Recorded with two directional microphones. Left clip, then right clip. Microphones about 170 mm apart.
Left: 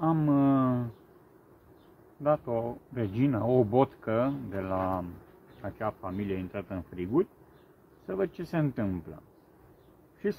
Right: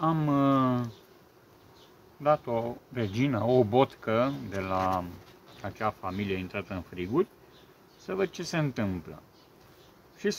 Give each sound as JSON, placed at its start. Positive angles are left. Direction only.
{"t": 0.0, "sound": "a sound", "side_deg": -5}
{"t": 2.2, "sound": "speech", "side_deg": 0}
{"t": 8.1, "sound": "speech", "side_deg": -5}
{"t": 10.2, "sound": "speech", "side_deg": 0}